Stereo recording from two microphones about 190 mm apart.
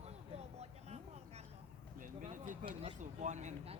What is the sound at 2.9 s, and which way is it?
Speech, 40° right (ahead or behind).